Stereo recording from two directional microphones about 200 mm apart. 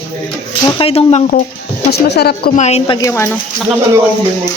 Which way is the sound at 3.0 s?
15° left (ahead or behind).